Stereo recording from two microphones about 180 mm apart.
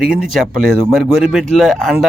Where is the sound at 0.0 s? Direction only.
5° right (ahead or behind).